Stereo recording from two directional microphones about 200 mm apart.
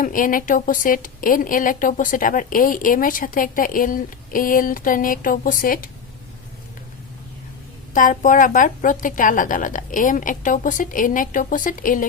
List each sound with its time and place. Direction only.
0.0 s a woman's voice: 45° left (ahead or behind)
7.9 s a woman's voice: 40° left (ahead or behind)